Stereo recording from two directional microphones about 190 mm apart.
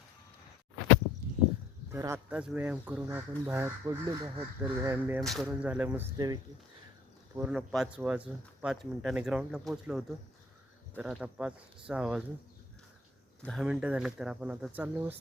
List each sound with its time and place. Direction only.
1.9 s speech: 15° right (ahead or behind)
5.2 s speech: centre (ahead or behind)
6.1 s speech: 20° right (ahead or behind)
7.3 s speech: 5° right (ahead or behind)
13.4 s speech: centre (ahead or behind)